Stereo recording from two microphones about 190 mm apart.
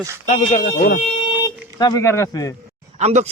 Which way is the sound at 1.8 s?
20° left (ahead or behind).